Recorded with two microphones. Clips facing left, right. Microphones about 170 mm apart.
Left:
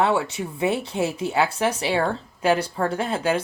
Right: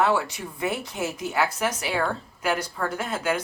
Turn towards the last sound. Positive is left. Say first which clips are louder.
# left 4 dB
turn(degrees=30)  # may be behind; listen again after turning